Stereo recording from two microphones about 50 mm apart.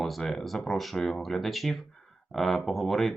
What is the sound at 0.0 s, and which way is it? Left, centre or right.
Speech, centre.